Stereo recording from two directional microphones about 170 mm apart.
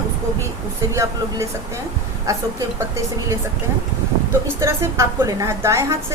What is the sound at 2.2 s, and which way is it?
Speech, 20° right (ahead or behind).